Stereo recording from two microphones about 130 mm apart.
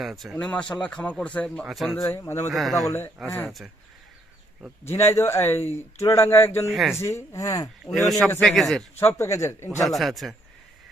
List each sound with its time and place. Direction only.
0.0 s speech: centre (ahead or behind)
0.3 s speech: 10° left (ahead or behind)
1.6 s speech: centre (ahead or behind)
2.1 s speech: 20° left (ahead or behind)
2.5 s speech: centre (ahead or behind)
4.9 s speech: 20° left (ahead or behind)
6.7 s speech: centre (ahead or behind)
7.0 s speech: 25° left (ahead or behind)
8.4 s speech: centre (ahead or behind)
9.0 s speech: 20° left (ahead or behind)
9.8 s speech: centre (ahead or behind)